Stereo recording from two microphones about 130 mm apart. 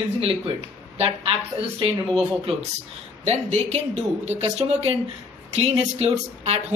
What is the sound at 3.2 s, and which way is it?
A woman's voice, 60° right (ahead or behind).